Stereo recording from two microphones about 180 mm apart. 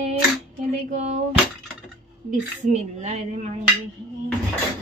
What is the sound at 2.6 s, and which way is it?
Speech, 40° right (ahead or behind).